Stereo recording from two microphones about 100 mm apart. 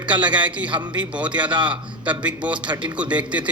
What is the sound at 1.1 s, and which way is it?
A man's voice, 15° right (ahead or behind).